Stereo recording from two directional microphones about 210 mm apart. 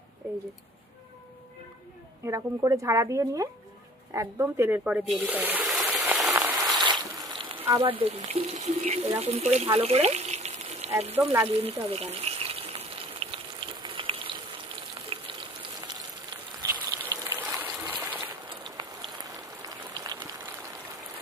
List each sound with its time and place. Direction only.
2.2 s speech: 15° right (ahead or behind)
6.0 s rain on surface: 5° right (ahead or behind)
6.3 s a sound: 10° right (ahead or behind)
7.2 s speech: 20° right (ahead or behind)
11.5 s water: 30° right (ahead or behind)
13.8 s frying: 25° right (ahead or behind); by 18.3 s 10° right (ahead or behind)
18.4 s a sound: 20° right (ahead or behind)